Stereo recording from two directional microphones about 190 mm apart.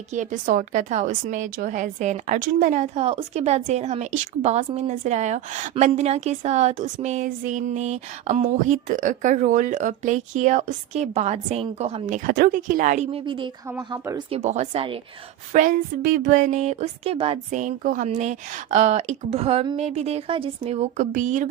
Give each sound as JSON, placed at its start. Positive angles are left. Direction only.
{"t": 0.1, "sound": "a woman's voice", "side_deg": -40}
{"t": 14.3, "sound": "a woman's voice", "side_deg": -35}
{"t": 15.5, "sound": "a woman's voice", "side_deg": -45}